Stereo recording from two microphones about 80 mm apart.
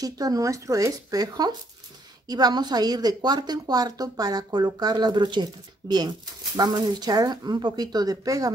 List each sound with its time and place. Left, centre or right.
0.0 s speech: right